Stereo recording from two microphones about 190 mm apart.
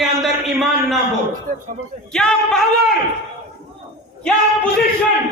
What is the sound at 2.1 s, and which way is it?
Speech, 5° left (ahead or behind).